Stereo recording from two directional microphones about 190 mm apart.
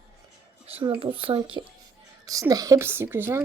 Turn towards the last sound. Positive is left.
turn(degrees=-10)  # may be behind; listen again after turning